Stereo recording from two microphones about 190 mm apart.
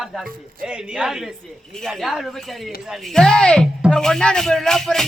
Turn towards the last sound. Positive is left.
turn(degrees=0)  # may be behind; listen again after turning